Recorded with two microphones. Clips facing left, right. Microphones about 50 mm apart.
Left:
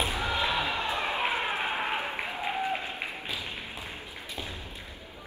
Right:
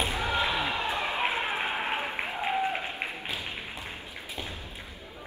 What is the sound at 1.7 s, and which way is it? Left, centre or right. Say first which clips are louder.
Applause: even; right.